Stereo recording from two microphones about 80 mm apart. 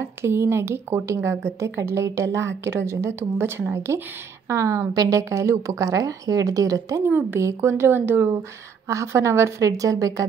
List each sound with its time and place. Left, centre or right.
0.0 s a woman's voice: right
7.1 s speech: right
7.3 s speech: right